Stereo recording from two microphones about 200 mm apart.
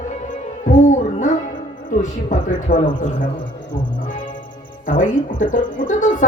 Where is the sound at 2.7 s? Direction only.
35° left (ahead or behind).